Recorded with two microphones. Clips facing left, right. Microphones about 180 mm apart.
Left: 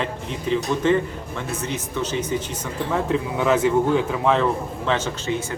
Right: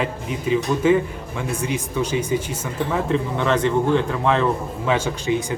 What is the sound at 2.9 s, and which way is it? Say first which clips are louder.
Speech: even; 5° left (ahead or behind).